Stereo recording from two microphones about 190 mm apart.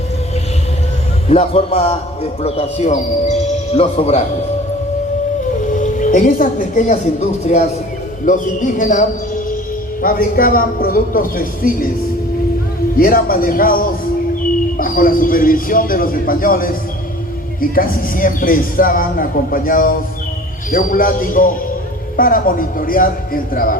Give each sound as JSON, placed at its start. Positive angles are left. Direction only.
{"t": 1.3, "sound": "speech", "side_deg": 35}
{"t": 5.7, "sound": "speech", "side_deg": 45}
{"t": 13.0, "sound": "speech", "side_deg": 50}